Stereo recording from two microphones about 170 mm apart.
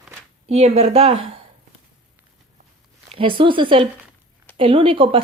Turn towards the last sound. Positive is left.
turn(degrees=-30)  # may be behind; listen again after turning